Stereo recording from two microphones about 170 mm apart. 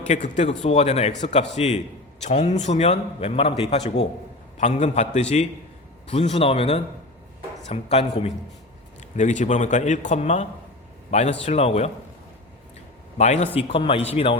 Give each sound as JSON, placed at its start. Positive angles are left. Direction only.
{"t": 0.1, "sound": "a man's voice", "side_deg": 45}
{"t": 13.1, "sound": "a man's voice", "side_deg": 40}